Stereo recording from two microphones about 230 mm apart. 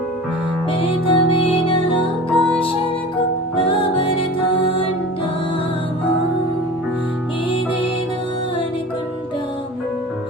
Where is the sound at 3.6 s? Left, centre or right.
Left.